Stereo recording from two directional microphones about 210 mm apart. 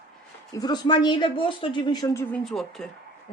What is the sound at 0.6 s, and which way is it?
Speech, 20° left (ahead or behind).